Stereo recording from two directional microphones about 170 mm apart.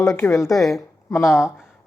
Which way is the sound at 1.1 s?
15° left (ahead or behind).